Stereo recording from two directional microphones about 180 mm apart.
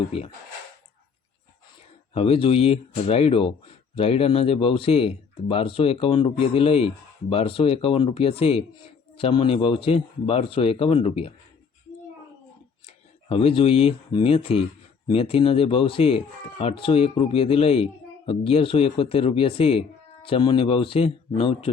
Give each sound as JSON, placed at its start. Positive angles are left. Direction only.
{"t": 2.1, "sound": "speech", "side_deg": 30}
{"t": 12.8, "sound": "speech", "side_deg": 30}